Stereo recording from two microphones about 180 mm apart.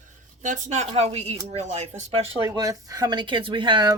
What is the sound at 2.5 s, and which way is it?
Speech, 20° right (ahead or behind).